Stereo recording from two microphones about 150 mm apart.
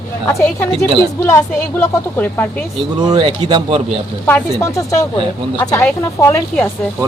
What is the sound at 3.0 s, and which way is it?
Speech, 30° right (ahead or behind).